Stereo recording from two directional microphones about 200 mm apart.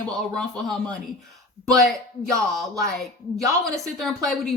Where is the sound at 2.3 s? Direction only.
15° right (ahead or behind).